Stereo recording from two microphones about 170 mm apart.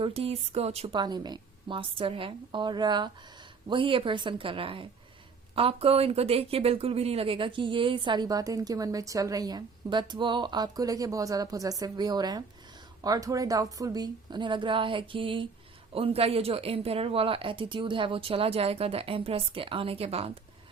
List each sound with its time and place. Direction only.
0.0 s speech: 35° right (ahead or behind)
0.9 s speech: 25° right (ahead or behind)